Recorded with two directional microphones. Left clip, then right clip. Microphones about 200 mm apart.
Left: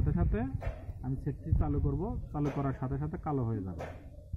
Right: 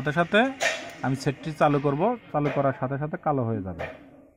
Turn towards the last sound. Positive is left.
turn(degrees=-30)  # may be behind; listen again after turning